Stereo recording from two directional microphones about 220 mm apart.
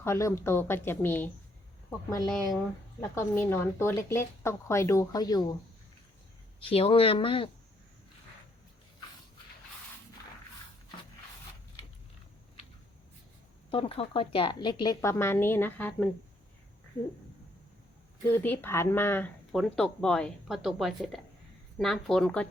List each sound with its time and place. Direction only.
0.0 s a woman's voice: 10° left (ahead or behind)
6.6 s speech: 25° left (ahead or behind)
13.7 s speech: 25° left (ahead or behind); by 16.0 s 5° left (ahead or behind)
18.3 s speech: 10° left (ahead or behind)